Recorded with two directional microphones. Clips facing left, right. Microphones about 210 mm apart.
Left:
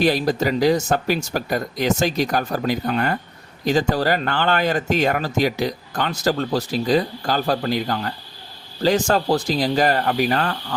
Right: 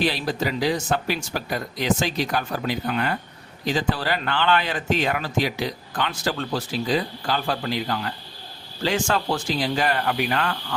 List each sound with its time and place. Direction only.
0.0 s speech: 45° left (ahead or behind)